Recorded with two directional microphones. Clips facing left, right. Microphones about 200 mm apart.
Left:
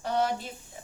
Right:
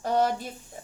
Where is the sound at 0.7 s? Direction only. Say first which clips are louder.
Right 3 dB; 45° right (ahead or behind).